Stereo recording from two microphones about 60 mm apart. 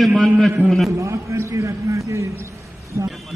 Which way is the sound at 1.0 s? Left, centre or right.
Right.